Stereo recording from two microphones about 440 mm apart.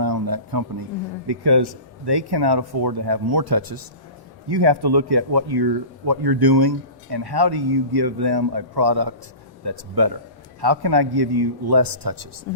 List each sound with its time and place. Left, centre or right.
0.0 s a sound: right
1.3 s speech: right
4.4 s speech: right